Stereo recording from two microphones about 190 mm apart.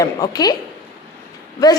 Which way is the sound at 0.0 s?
20° left (ahead or behind).